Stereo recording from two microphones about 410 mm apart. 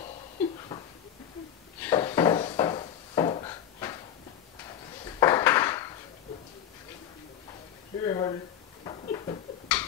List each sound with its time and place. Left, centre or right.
1.8 s wood: centre
5.0 s dishes: centre
8.0 s a sound: centre